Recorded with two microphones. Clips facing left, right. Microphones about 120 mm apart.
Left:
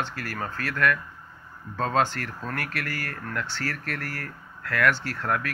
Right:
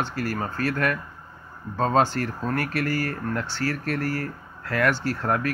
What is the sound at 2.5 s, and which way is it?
Speech, 35° right (ahead or behind).